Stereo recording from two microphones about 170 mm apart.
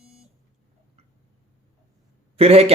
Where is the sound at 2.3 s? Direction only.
35° right (ahead or behind).